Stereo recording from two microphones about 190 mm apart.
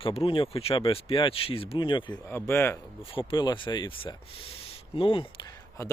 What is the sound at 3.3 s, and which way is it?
Speech, 25° left (ahead or behind).